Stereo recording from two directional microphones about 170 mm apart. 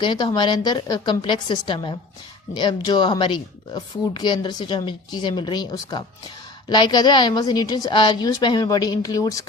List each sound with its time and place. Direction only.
0.0 s speech: 25° left (ahead or behind)